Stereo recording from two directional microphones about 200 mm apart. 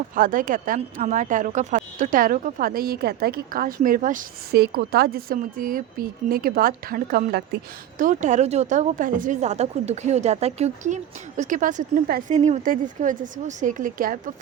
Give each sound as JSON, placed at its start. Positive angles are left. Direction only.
{"t": 0.1, "sound": "speech", "side_deg": -40}